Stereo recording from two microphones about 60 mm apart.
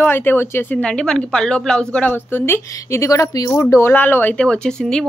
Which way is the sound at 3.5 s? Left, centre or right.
Left.